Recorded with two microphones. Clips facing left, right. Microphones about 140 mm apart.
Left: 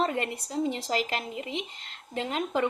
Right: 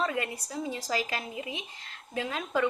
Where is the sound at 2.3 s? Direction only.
25° left (ahead or behind).